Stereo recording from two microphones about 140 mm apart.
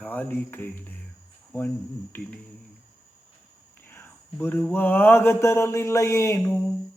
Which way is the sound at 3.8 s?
15° left (ahead or behind).